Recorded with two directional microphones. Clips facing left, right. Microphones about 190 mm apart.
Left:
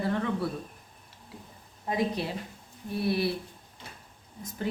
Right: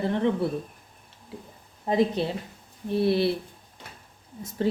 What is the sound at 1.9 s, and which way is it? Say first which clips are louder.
Speech: right 6 dB; 25° right (ahead or behind).